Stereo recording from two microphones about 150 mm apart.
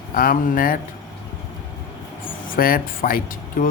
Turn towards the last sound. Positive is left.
turn(degrees=70)  # may be behind; listen again after turning